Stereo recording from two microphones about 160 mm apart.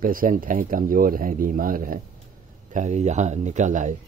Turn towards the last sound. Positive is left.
turn(degrees=-50)  # may be behind; listen again after turning